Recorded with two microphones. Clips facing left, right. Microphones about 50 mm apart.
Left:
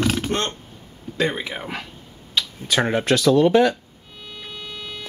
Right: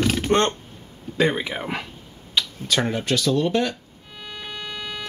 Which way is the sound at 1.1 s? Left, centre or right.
Centre.